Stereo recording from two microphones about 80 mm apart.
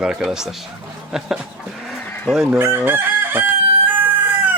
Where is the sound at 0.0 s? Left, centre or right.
Centre.